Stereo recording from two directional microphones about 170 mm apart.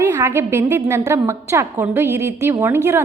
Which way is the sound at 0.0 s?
15° right (ahead or behind).